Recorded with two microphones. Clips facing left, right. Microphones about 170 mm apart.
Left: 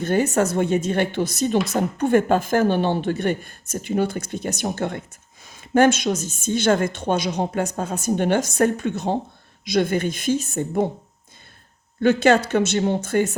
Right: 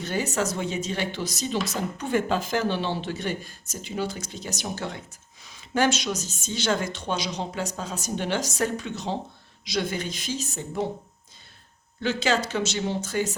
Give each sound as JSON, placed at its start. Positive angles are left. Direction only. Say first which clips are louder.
{"t": 0.0, "sound": "a woman's voice", "louder": "left 7 dB", "side_deg": 55}
{"t": 11.9, "sound": "a woman's voice", "louder": "left 9 dB", "side_deg": 55}